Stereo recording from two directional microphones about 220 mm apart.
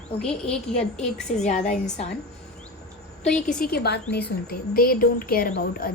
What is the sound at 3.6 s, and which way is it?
A woman's voice, 45° left (ahead or behind).